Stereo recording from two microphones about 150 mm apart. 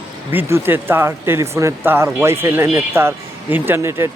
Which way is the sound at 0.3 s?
15° right (ahead or behind).